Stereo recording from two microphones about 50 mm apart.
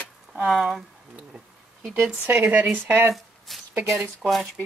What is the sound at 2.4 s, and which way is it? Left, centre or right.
Speech, right.